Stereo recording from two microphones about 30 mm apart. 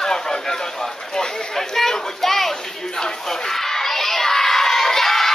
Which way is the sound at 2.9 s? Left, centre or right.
Left.